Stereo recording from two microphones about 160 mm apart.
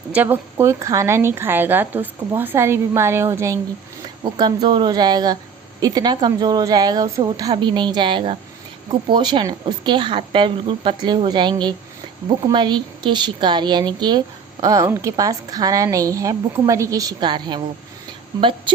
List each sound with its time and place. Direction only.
0.1 s a woman's voice: 10° right (ahead or behind); by 18.7 s 30° right (ahead or behind)